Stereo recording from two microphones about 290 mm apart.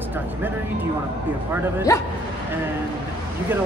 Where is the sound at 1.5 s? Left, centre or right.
Centre.